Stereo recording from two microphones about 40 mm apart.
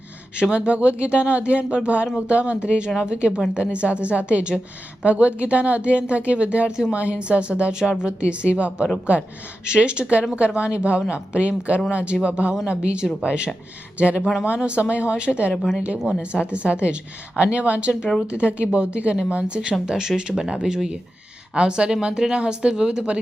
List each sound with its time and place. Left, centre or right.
0.5 s a woman's voice: right
19.8 s speech: centre
21.5 s a woman's voice: right